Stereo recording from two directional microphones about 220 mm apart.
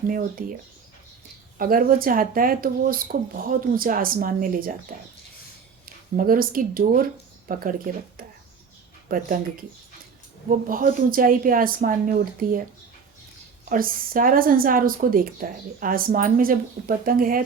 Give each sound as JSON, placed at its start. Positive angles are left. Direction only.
{"t": 0.1, "sound": "speech", "side_deg": -40}
{"t": 1.5, "sound": "speech", "side_deg": -40}
{"t": 6.1, "sound": "speech", "side_deg": -40}
{"t": 9.0, "sound": "speech", "side_deg": -40}
{"t": 10.7, "sound": "speech", "side_deg": -40}
{"t": 13.7, "sound": "speech", "side_deg": -40}